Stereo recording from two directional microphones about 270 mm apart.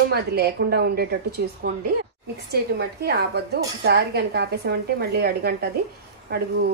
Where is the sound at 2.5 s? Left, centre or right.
Right.